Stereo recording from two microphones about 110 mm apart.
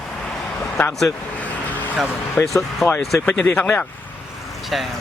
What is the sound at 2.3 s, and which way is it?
Speech, 30° left (ahead or behind).